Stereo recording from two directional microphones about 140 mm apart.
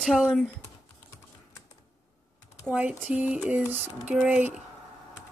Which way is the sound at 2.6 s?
10° right (ahead or behind).